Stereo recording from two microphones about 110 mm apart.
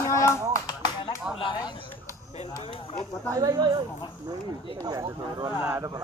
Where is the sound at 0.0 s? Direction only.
25° left (ahead or behind).